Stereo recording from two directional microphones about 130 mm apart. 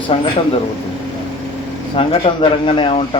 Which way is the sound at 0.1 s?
50° left (ahead or behind).